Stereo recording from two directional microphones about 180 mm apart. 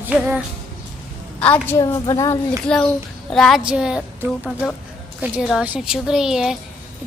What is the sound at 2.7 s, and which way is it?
A woman's voice, 5° left (ahead or behind).